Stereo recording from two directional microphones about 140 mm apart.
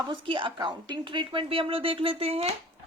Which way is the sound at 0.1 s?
40° right (ahead or behind).